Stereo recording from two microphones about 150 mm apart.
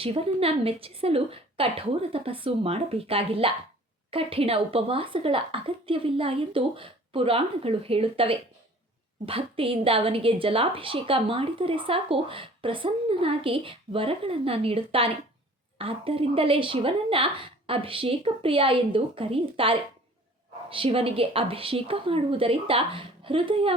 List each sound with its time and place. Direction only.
0.0 s a woman's voice: 40° right (ahead or behind)